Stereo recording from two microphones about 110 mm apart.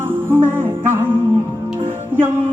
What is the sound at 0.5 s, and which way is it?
Music, 20° right (ahead or behind).